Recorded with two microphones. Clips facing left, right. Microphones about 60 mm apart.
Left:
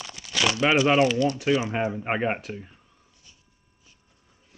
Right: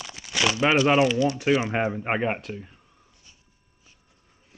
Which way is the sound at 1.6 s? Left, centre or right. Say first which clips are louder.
Right 1 dB; right.